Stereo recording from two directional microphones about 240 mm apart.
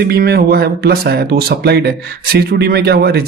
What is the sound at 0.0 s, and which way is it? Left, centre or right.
Speech, right.